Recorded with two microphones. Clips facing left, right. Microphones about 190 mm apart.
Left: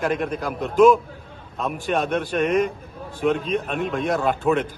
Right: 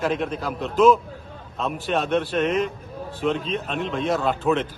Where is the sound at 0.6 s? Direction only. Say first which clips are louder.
Left 2 dB; 10° left (ahead or behind).